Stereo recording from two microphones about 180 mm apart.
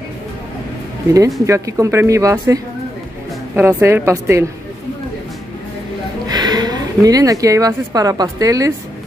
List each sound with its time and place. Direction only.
1.1 s speech: 15° right (ahead or behind)
6.2 s speech: 20° right (ahead or behind)